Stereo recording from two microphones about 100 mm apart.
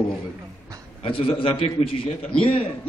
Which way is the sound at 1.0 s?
65° left (ahead or behind).